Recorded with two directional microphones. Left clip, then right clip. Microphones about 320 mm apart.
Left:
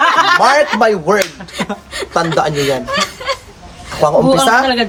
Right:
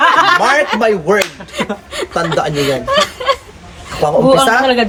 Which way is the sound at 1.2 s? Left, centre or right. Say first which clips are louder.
Right 1 dB; centre.